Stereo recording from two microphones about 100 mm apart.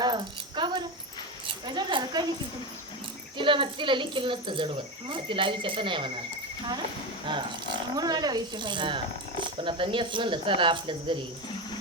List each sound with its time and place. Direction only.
0.0 s keys jangling: 50° right (ahead or behind)
1.6 s a woman's voice: 45° right (ahead or behind)
3.3 s cricket: 55° right (ahead or behind)
7.3 s speech: 50° right (ahead or behind)
9.4 s cricket: 55° right (ahead or behind)